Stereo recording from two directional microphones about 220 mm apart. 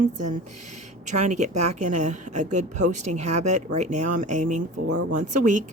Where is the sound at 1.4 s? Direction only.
30° right (ahead or behind).